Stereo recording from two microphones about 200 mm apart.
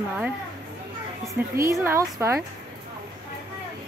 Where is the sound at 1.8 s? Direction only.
15° right (ahead or behind).